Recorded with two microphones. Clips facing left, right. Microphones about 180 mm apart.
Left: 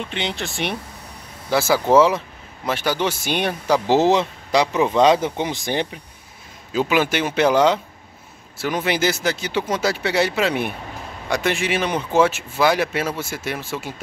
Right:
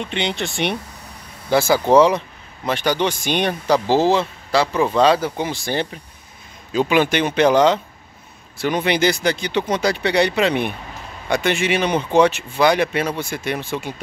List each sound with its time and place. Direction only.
0.0 s speech: centre (ahead or behind)
6.7 s speech: 5° left (ahead or behind)